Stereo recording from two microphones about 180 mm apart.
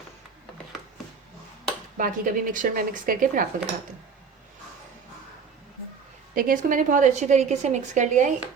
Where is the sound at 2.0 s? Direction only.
50° right (ahead or behind).